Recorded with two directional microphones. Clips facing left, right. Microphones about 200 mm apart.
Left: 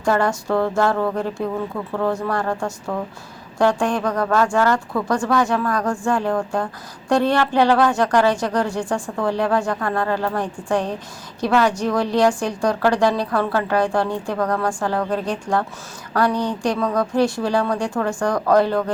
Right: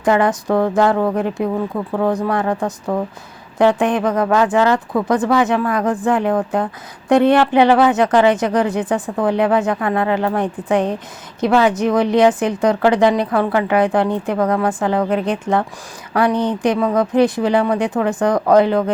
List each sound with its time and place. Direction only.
0.0 s speech: 20° right (ahead or behind)